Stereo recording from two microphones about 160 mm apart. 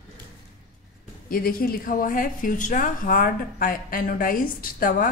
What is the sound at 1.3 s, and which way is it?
A woman's voice, 65° left (ahead or behind).